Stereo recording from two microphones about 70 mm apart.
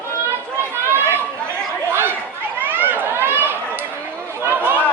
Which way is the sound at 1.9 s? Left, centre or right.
Right.